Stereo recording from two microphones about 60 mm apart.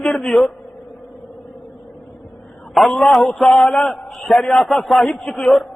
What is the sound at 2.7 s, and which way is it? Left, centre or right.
A man's voice, centre.